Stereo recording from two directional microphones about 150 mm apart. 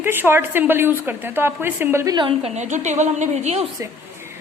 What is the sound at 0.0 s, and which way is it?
A woman's voice, 15° right (ahead or behind).